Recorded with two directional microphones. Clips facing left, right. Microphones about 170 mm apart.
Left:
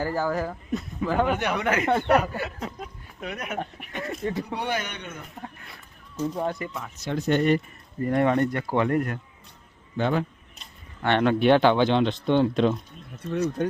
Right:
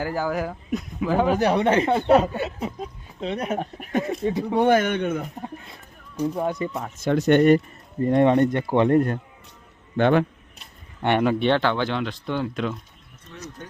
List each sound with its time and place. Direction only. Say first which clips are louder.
0.0 s speech: right 1 dB; 5° right (ahead or behind)
1.3 s speech: right 6 dB; 35° right (ahead or behind)
4.0 s speech: right 4 dB; 15° right (ahead or behind)
4.5 s a man's voice: right 11 dB; 50° right (ahead or behind)
5.4 s a sound: right 5 dB; 20° right (ahead or behind)
6.8 s a man's voice: right 9 dB; 50° right (ahead or behind)
7.2 s speech: right 6 dB; 65° right (ahead or behind)
8.0 s speech: right 4 dB; 25° right (ahead or behind)
10.0 s speech: right 6 dB; 70° right (ahead or behind)
10.6 s a sound: right 3 dB; 10° right (ahead or behind)
11.4 s speech: left 3 dB; 15° left (ahead or behind)
13.6 s speech: left 14 dB; 65° left (ahead or behind)